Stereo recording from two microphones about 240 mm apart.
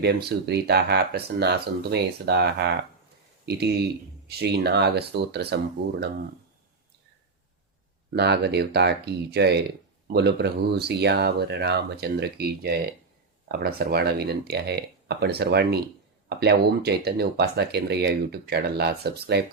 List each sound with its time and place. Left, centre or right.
0.0 s speech: right
8.1 s speech: right